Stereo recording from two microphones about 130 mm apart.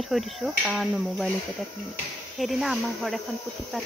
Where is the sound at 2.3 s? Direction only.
Centre (ahead or behind).